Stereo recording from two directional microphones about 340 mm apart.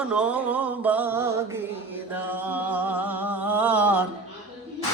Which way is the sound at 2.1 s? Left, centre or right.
Centre.